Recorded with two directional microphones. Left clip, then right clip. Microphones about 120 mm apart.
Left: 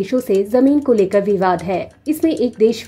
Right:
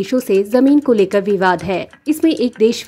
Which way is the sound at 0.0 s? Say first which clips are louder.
Right 1 dB; 25° right (ahead or behind).